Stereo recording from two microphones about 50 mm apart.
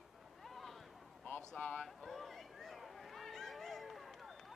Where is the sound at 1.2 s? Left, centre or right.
Left.